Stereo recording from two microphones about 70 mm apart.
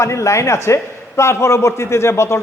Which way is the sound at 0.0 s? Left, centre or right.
Left.